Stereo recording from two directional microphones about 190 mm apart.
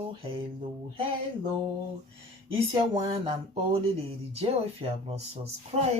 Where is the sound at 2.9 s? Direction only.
30° right (ahead or behind).